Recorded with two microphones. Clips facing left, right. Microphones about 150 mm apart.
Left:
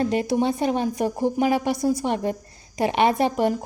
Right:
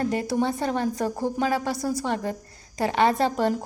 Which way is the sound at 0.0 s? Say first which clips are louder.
Left 3 dB; 20° left (ahead or behind).